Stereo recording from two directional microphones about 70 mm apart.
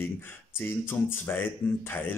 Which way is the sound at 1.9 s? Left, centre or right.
Left.